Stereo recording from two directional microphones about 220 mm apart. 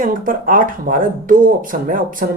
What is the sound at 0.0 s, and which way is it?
Speech, 40° right (ahead or behind).